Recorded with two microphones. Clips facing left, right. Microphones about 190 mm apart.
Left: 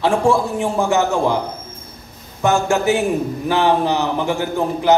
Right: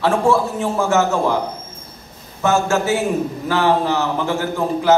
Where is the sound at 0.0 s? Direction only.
15° left (ahead or behind).